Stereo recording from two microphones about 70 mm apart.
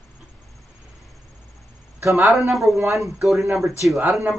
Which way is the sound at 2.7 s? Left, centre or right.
Right.